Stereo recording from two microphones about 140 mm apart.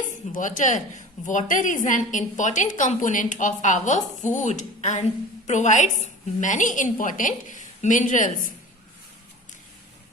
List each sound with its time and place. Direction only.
0.3 s a woman's voice: 65° left (ahead or behind)